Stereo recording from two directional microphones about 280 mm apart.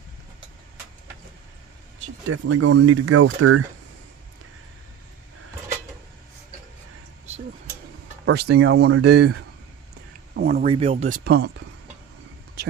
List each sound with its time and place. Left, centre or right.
2.2 s speech: right
8.2 s speech: right
10.7 s speech: centre; by 11.6 s right